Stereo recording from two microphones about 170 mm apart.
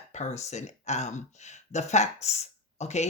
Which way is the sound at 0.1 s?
40° left (ahead or behind).